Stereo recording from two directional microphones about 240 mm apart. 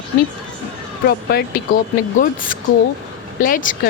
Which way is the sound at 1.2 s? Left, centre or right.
Left.